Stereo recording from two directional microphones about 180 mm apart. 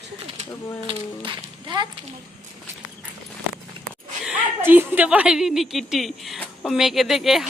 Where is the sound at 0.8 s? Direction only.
30° right (ahead or behind).